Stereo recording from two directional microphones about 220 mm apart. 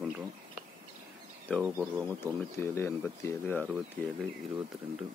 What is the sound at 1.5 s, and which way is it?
Speech, 10° right (ahead or behind).